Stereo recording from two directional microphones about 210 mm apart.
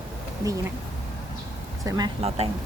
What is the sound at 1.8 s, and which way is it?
Speech, 20° right (ahead or behind).